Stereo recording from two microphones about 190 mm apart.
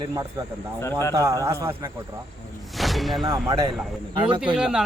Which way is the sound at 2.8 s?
Centre (ahead or behind).